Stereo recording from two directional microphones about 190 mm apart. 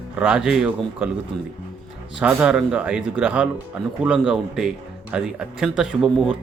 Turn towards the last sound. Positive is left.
turn(degrees=-5)  # may be behind; listen again after turning